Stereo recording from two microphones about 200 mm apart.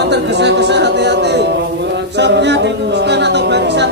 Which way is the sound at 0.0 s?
60° right (ahead or behind).